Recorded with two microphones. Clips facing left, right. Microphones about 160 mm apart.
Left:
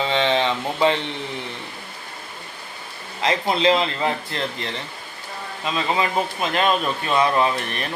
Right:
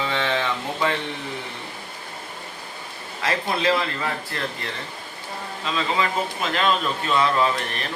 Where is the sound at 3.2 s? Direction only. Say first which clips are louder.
Left 4 dB; 20° left (ahead or behind).